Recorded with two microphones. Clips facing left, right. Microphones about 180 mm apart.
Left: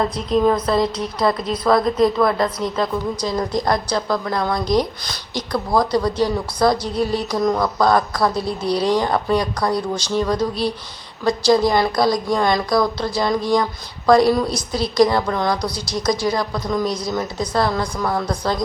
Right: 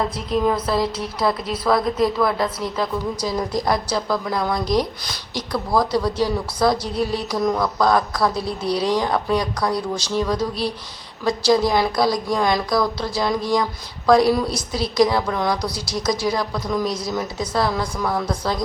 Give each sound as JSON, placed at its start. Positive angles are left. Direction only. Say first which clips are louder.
{"t": 0.4, "sound": "a woman's voice", "louder": "left 2 dB", "side_deg": -5}